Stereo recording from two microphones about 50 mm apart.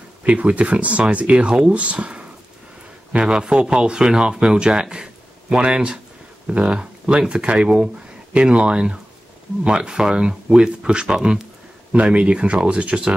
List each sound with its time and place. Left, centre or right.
0.3 s speech: right
11.9 s speech: right